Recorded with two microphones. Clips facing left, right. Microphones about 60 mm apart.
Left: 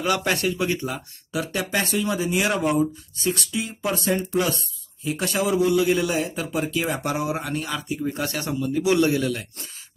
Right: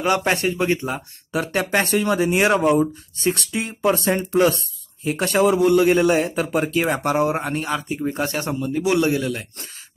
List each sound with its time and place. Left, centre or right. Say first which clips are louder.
0.0 s a man's voice: right 3 dB; right